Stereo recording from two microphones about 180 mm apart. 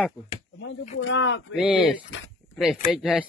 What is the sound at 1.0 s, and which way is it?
Speech, 90° left.